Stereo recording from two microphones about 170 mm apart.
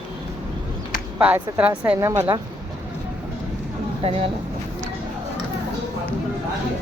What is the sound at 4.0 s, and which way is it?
Speech, 35° right (ahead or behind).